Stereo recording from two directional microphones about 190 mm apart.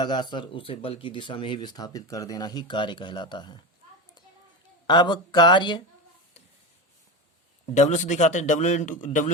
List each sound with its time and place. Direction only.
0.0 s speech: 25° left (ahead or behind)
4.9 s speech: 25° left (ahead or behind)
7.7 s a man's voice: 40° left (ahead or behind)